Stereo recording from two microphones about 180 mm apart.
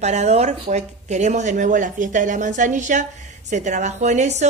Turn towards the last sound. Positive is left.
turn(degrees=-40)  # may be behind; listen again after turning